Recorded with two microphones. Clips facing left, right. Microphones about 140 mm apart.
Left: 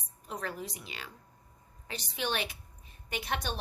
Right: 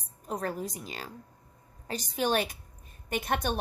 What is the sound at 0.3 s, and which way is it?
A woman's voice, 45° right (ahead or behind).